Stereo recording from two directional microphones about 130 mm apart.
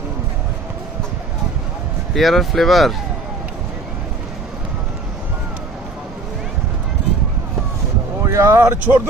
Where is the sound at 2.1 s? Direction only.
Centre (ahead or behind).